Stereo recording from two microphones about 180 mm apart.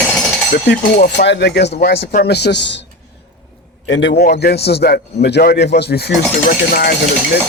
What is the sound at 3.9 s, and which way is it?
Speech, 90° left.